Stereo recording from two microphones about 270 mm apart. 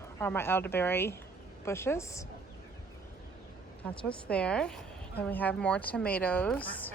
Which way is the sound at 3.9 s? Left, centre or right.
Centre.